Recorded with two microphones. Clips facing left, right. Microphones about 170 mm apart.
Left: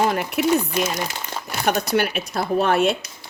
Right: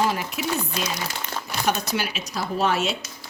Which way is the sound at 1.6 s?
60° left (ahead or behind).